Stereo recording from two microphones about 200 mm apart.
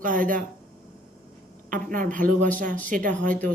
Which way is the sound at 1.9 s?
40° right (ahead or behind).